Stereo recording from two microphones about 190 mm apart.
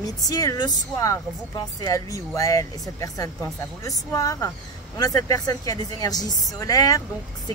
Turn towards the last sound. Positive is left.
turn(degrees=20)  # may be behind; listen again after turning